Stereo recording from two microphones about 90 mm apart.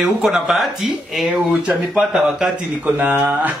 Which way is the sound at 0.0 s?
5° right (ahead or behind).